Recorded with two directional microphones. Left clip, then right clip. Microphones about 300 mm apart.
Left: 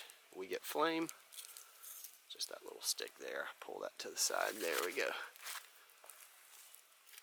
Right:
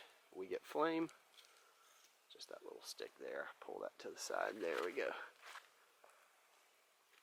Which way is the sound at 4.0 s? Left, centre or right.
Centre.